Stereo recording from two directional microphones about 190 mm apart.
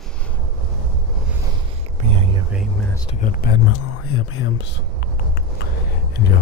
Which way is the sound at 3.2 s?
55° left (ahead or behind).